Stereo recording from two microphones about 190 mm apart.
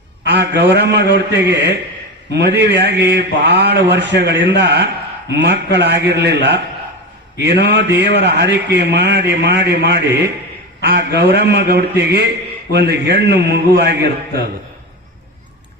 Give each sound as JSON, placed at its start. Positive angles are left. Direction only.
{"t": 0.3, "sound": "a man's voice", "side_deg": -60}